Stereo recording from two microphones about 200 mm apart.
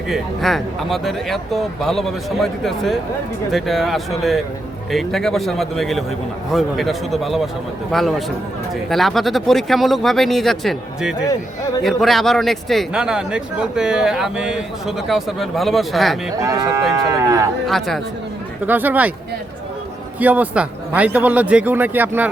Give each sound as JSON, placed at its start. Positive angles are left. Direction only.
{"t": 0.1, "sound": "a man's voice", "side_deg": 0}
{"t": 16.4, "sound": "a man's voice", "side_deg": -15}
{"t": 17.7, "sound": "a man's voice", "side_deg": 0}
{"t": 18.6, "sound": "a man's voice", "side_deg": -10}
{"t": 20.1, "sound": "a man's voice", "side_deg": -10}